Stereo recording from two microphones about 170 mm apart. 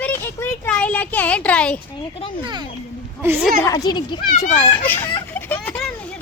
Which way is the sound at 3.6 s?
25° left (ahead or behind).